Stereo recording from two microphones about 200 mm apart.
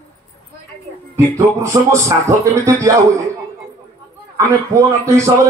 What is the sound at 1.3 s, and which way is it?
A man's voice, 15° right (ahead or behind).